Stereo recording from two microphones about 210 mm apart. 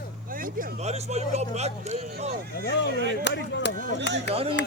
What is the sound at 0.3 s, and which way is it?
Speech, 40° right (ahead or behind).